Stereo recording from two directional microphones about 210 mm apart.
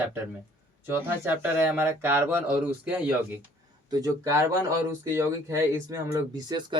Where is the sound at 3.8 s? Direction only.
15° right (ahead or behind).